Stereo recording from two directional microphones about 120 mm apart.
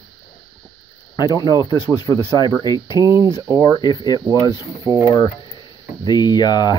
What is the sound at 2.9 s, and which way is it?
Speech, 30° right (ahead or behind).